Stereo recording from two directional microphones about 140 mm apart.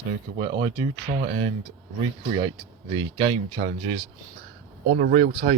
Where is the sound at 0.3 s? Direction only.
35° right (ahead or behind).